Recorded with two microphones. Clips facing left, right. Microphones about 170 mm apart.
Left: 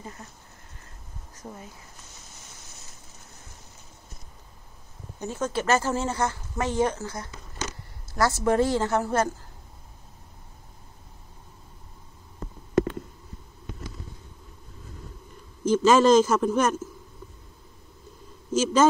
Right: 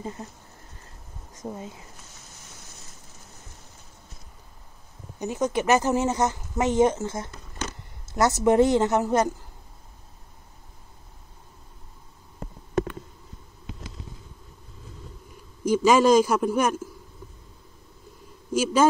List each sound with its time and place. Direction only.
0.0 s a woman's voice: 25° right (ahead or behind)
1.4 s a woman's voice: 20° right (ahead or behind)
5.2 s a woman's voice: 15° right (ahead or behind)
15.6 s speech: 10° right (ahead or behind)
18.5 s a man's voice: 10° right (ahead or behind)